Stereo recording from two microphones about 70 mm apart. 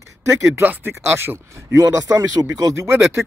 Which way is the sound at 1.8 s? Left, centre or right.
Right.